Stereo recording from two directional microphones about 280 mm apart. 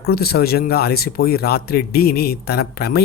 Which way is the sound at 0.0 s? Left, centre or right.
Left.